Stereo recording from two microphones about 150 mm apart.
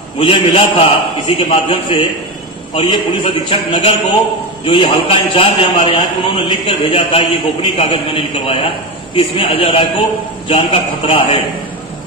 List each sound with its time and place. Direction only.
0.2 s a man's voice: 35° left (ahead or behind)